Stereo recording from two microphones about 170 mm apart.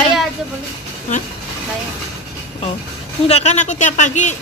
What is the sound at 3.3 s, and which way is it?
A woman's voice, 40° left (ahead or behind).